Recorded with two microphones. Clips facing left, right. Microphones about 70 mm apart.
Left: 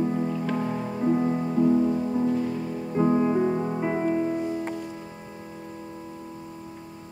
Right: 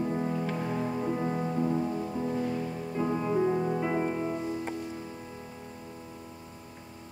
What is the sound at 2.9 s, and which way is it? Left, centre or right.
Music, left.